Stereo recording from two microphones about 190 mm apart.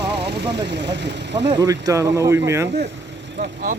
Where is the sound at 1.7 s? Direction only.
15° right (ahead or behind).